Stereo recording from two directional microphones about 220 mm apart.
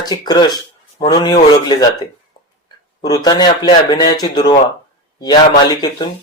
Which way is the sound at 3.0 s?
20° left (ahead or behind).